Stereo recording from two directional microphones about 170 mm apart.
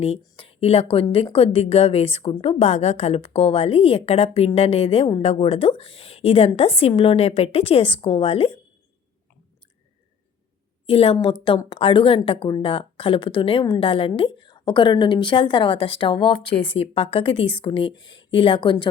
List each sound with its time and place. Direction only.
0.3 s a woman's voice: 35° left (ahead or behind)
10.8 s a woman's voice: 35° left (ahead or behind)